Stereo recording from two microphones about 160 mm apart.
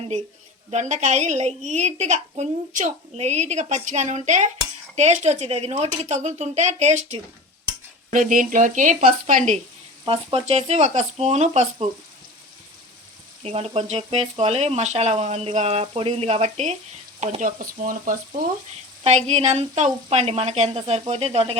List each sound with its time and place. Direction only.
0.7 s a woman's voice: 45° right (ahead or behind)
8.1 s a woman's voice: 55° right (ahead or behind)
13.4 s speech: 40° right (ahead or behind)
17.2 s frying: 50° right (ahead or behind)
19.0 s speech: 45° right (ahead or behind)